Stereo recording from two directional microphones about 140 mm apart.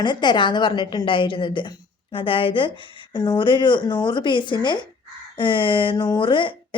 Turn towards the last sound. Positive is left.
turn(degrees=35)  # may be behind; listen again after turning